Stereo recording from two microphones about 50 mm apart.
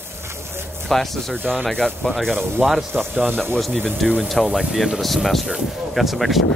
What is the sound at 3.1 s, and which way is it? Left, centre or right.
Speech, right.